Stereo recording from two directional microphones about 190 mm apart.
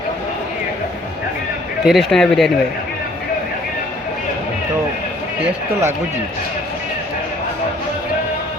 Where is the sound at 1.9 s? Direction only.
Centre (ahead or behind).